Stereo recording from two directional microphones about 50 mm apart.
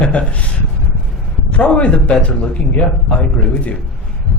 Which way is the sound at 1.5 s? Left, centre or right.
Left.